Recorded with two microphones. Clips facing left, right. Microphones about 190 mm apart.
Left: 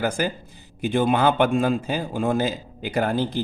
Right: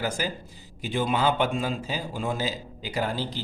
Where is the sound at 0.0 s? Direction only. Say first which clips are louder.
Left 5 dB; 55° left (ahead or behind).